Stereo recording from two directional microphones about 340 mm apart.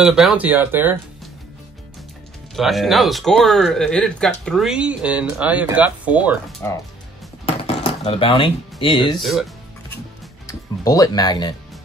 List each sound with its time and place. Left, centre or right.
0.0 s speech: centre
2.5 s speech: centre
6.6 s speech: centre
7.4 s a sound: centre
8.8 s speech: centre
9.2 s speech: centre
10.8 s speech: centre